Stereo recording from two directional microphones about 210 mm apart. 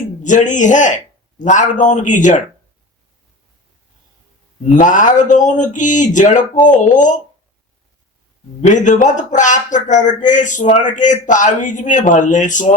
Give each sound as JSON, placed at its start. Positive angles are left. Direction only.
{"t": 0.2, "sound": "speech", "side_deg": 35}
{"t": 4.6, "sound": "speech", "side_deg": 35}
{"t": 8.6, "sound": "speech", "side_deg": 35}